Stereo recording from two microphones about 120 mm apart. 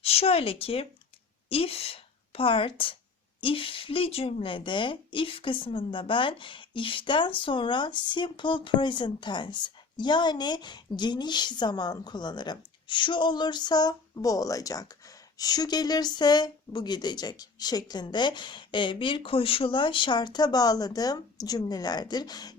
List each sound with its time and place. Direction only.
0.0 s a woman's voice: 55° left (ahead or behind); by 22.5 s 35° left (ahead or behind)